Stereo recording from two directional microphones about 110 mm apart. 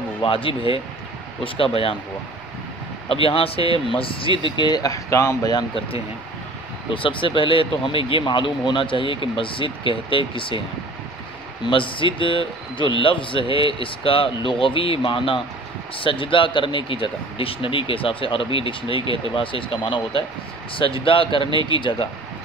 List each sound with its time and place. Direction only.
0.2 s speech: 55° left (ahead or behind)
3.1 s speech: 55° left (ahead or behind); by 5.5 s 25° left (ahead or behind)
6.9 s speech: 50° left (ahead or behind)
11.6 s speech: 50° left (ahead or behind)